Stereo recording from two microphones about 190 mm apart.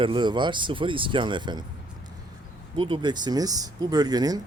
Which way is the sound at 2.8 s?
25° right (ahead or behind).